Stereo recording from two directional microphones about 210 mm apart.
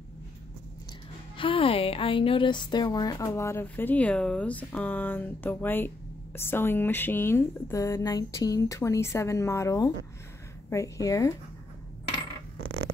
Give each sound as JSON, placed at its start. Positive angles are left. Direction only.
{"t": 1.3, "sound": "speech", "side_deg": 25}